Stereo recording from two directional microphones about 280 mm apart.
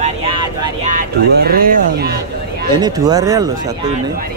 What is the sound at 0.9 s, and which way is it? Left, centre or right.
Speech, right.